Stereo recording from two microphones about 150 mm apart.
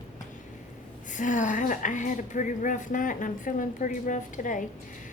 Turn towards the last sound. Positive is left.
turn(degrees=60)  # may be behind; listen again after turning